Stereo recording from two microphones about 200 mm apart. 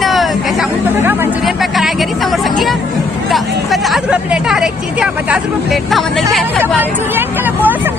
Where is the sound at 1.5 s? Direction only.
Centre (ahead or behind).